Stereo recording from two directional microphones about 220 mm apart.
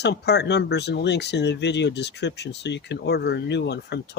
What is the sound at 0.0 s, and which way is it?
Speech, 50° left (ahead or behind).